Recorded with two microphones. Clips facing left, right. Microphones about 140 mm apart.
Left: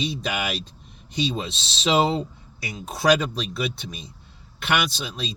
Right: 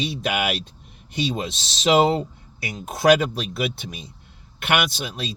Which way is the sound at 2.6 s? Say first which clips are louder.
Right 3 dB; 55° right (ahead or behind).